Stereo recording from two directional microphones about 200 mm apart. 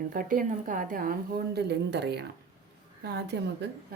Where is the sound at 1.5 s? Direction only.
55° right (ahead or behind).